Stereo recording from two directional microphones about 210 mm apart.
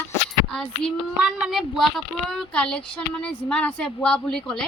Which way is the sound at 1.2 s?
Centre (ahead or behind).